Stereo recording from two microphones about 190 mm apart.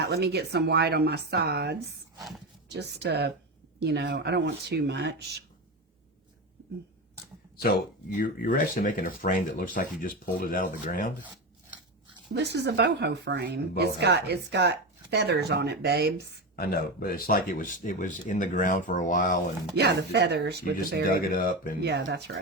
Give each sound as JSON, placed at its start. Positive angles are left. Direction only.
{"t": 0.0, "sound": "speech", "side_deg": -60}
{"t": 7.5, "sound": "speech", "side_deg": 55}
{"t": 12.3, "sound": "speech", "side_deg": -60}
{"t": 16.6, "sound": "speech", "side_deg": 50}
{"t": 19.7, "sound": "speech", "side_deg": -60}
{"t": 21.1, "sound": "speech", "side_deg": 50}
{"t": 21.8, "sound": "speech", "side_deg": -60}